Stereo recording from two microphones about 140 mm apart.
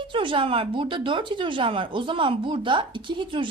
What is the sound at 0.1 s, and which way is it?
Speech, 35° right (ahead or behind).